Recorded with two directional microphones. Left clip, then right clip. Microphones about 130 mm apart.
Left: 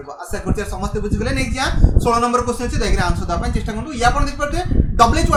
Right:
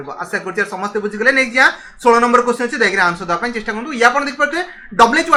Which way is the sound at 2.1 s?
5° left (ahead or behind).